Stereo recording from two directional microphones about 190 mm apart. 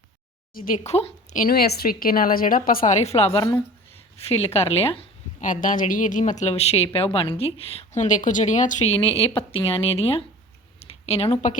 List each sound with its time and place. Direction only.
0.5 s a woman's voice: 50° left (ahead or behind)
0.9 s a woman's voice: 35° left (ahead or behind)
3.3 s a woman's voice: 15° left (ahead or behind)
4.3 s a woman's voice: 35° left (ahead or behind)
5.5 s speech: 45° left (ahead or behind)